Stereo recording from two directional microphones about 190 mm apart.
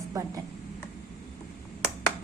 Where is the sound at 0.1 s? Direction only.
20° right (ahead or behind).